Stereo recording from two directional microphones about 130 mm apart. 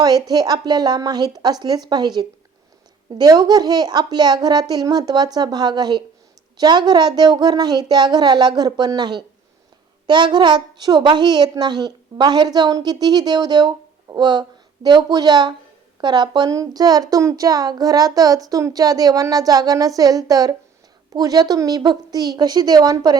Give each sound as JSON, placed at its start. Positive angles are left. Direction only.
{"t": 0.0, "sound": "a woman's voice", "side_deg": -30}